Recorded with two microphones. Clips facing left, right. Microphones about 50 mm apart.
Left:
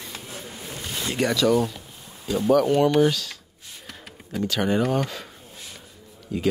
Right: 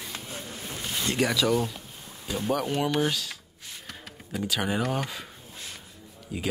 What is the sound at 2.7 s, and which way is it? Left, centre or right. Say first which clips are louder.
Speech: left 7 dB; centre.